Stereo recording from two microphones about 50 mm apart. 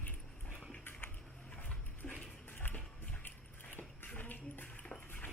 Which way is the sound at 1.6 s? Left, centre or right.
Left.